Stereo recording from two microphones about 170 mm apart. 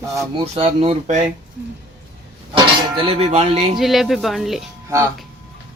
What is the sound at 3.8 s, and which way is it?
Speech, centre (ahead or behind).